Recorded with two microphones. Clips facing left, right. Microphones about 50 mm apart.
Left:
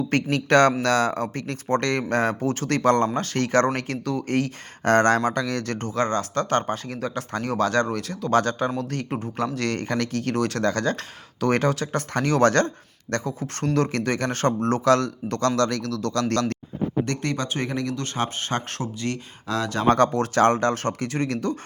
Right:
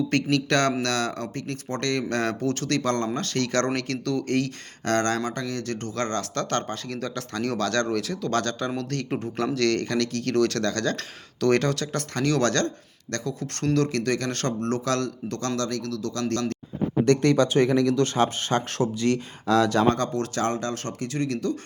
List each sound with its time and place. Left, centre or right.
0.1 s speech: left
4.9 s speech: left
6.1 s speech: centre
7.9 s speech: centre
8.3 s speech: centre
9.9 s speech: left
10.3 s speech: centre
10.6 s speech: left
17.1 s speech: left
19.0 s speech: centre
20.1 s speech: left